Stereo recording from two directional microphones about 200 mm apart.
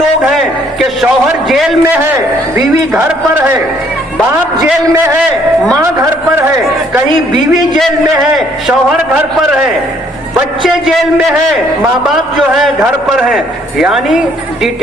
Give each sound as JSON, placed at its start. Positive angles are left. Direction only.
{"t": 0.2, "sound": "a man's voice", "side_deg": 0}
{"t": 7.1, "sound": "a man's voice", "side_deg": -25}
{"t": 7.8, "sound": "a man's voice", "side_deg": 0}
{"t": 10.6, "sound": "a man's voice", "side_deg": 0}
{"t": 13.3, "sound": "a man's voice", "side_deg": 0}